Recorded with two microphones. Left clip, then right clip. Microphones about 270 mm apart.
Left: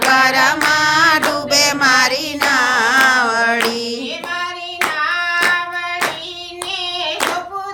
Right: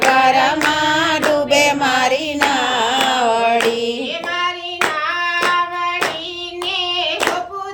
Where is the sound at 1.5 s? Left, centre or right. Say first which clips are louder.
Left 4 dB; centre.